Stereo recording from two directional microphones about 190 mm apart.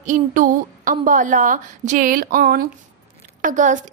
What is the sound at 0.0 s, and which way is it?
A woman's voice, 45° right (ahead or behind).